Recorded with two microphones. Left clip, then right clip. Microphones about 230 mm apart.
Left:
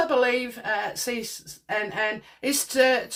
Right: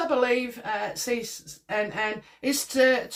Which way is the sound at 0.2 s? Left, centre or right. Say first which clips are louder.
Left 1 dB; left.